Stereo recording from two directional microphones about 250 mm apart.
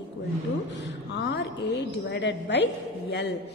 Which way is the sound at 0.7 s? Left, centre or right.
Left.